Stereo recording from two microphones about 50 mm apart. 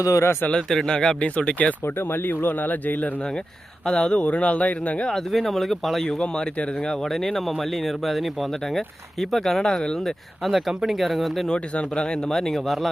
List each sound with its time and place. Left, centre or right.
0.1 s speech: left
0.5 s speech: centre
1.2 s speech: left
1.8 s speech: left
3.8 s speech: left
5.1 s speech: centre
6.1 s speech: centre
10.5 s speech: centre
11.4 s speech: left
12.3 s speech: centre